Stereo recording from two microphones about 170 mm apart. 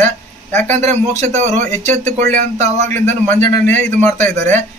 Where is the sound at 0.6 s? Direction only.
40° right (ahead or behind).